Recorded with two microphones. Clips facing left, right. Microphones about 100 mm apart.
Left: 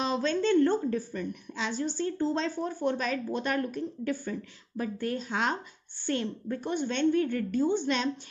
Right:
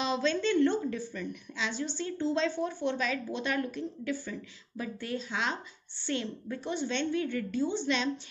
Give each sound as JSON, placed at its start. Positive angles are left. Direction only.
{"t": 0.0, "sound": "a woman's voice", "side_deg": 45}